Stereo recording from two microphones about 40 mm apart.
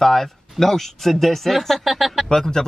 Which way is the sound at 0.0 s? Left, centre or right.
Centre.